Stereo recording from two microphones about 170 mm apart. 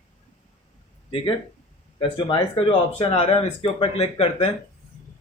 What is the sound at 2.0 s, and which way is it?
Speech, 30° left (ahead or behind).